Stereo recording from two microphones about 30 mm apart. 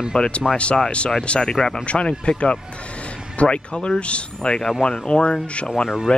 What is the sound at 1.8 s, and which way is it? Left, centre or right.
Speech, left.